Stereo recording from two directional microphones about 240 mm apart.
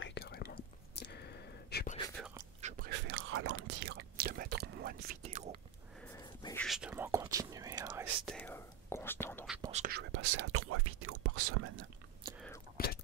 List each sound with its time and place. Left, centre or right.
0.0 s whispering: left
2.7 s whispering: right
3.1 s whispering: right
3.8 s whispering: right
6.1 s dog: centre
6.6 s whispering: centre
8.3 s whispering: centre
9.7 s whispering: right
9.9 s whispering: right
12.7 s whispering: left